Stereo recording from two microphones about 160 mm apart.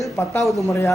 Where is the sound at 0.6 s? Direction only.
20° left (ahead or behind).